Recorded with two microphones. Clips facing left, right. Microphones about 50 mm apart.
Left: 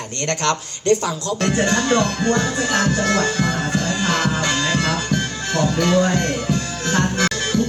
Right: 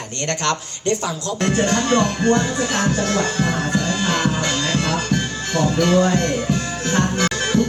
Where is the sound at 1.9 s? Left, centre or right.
Right.